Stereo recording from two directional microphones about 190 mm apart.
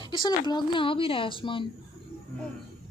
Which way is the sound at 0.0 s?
25° left (ahead or behind).